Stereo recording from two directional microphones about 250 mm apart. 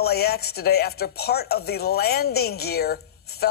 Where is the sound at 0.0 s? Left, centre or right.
Left.